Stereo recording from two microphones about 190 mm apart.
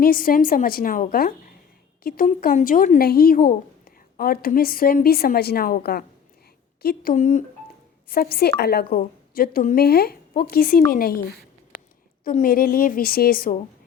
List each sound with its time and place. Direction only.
0.0 s a woman's voice: 50° left (ahead or behind)